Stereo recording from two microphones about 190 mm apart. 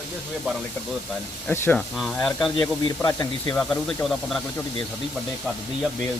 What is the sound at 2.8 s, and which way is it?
Speech, 20° left (ahead or behind).